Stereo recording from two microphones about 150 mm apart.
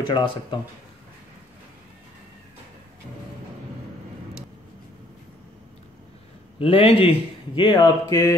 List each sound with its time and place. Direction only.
0.0 s a man's voice: 30° left (ahead or behind)
6.6 s a man's voice: 40° left (ahead or behind); by 8.4 s 20° left (ahead or behind)